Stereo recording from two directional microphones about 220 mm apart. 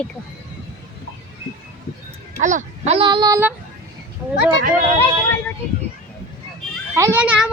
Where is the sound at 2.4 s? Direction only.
35° right (ahead or behind); by 3.6 s 10° right (ahead or behind).